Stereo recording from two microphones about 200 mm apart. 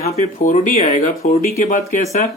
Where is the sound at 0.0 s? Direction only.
35° left (ahead or behind).